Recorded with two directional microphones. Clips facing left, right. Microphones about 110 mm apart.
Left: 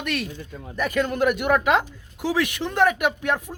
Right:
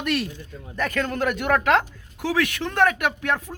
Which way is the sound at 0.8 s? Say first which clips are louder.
Left 2 dB; 10° left (ahead or behind).